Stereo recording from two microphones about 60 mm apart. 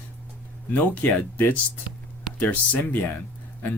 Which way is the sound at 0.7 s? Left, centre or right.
Left.